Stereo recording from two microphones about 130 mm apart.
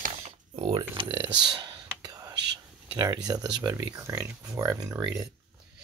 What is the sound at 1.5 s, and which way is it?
Whispering, 35° right (ahead or behind).